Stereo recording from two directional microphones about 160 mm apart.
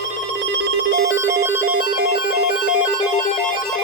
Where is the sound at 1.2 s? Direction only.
15° right (ahead or behind).